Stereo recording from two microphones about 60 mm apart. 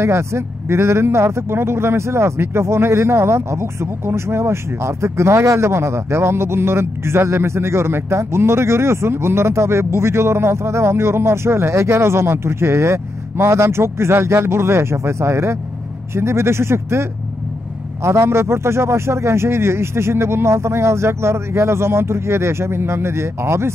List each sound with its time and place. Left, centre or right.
0.0 s speech: right
18.0 s speech: right